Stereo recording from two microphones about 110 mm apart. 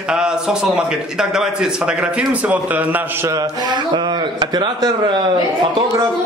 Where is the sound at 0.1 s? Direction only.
5° right (ahead or behind).